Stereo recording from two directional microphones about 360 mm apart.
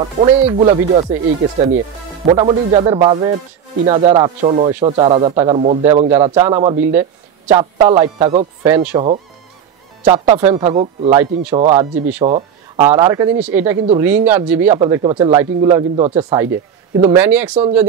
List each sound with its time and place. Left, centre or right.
0.2 s speech: centre
2.2 s speech: centre
12.4 s speech: centre